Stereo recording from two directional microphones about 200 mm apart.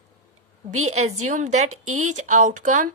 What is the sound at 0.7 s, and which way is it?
A woman's voice, 35° right (ahead or behind).